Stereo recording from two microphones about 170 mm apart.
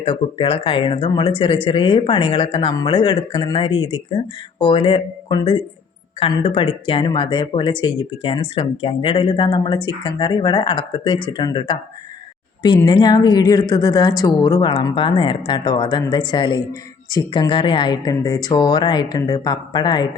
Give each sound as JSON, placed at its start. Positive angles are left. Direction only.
{"t": 0.0, "sound": "speech", "side_deg": 35}